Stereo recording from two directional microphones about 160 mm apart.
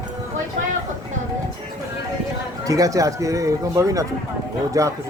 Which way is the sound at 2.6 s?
20° right (ahead or behind).